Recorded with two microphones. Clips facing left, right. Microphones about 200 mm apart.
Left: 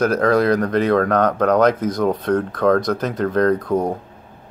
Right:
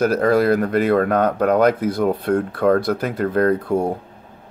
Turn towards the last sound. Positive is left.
turn(degrees=-10)  # may be behind; listen again after turning